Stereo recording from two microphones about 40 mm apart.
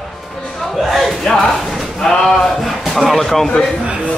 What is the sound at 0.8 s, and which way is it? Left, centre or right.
Battle cry, centre.